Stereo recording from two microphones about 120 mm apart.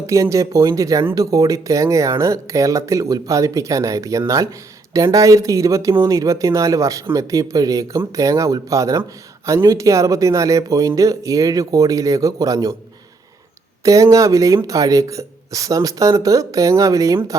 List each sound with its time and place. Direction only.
0.1 s speech: 25° right (ahead or behind)
13.8 s speech: 25° right (ahead or behind)